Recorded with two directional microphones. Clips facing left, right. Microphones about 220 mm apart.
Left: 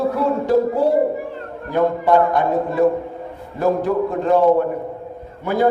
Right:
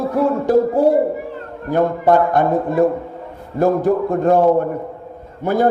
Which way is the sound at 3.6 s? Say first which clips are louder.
Right 3 dB; 50° right (ahead or behind).